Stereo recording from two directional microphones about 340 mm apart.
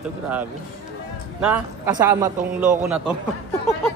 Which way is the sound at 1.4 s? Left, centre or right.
Centre.